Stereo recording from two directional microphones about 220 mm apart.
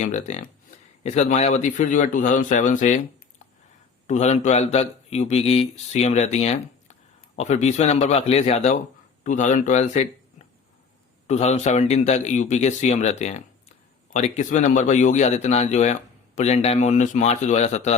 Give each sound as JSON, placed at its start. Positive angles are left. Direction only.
{"t": 0.0, "sound": "a man's voice", "side_deg": 30}